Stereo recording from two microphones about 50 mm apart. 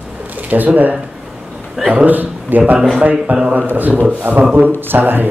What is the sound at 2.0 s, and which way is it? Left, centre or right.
A man's voice, right.